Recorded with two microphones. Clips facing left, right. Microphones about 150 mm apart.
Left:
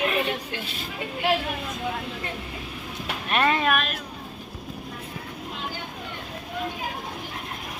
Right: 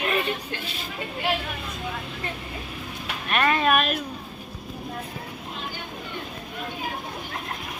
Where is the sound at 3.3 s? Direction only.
20° left (ahead or behind).